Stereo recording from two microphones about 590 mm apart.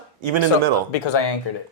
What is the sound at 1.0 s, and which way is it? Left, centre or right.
Speech, left.